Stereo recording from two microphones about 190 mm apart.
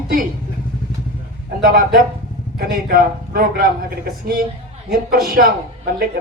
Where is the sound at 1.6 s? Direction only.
50° right (ahead or behind).